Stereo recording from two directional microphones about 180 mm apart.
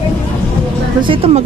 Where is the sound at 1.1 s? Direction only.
30° right (ahead or behind).